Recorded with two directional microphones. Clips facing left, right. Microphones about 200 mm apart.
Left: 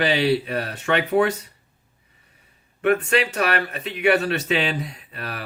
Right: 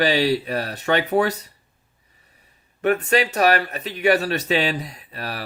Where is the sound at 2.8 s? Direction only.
40° right (ahead or behind).